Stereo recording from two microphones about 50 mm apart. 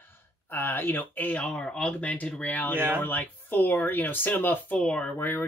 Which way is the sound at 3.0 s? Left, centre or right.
Left.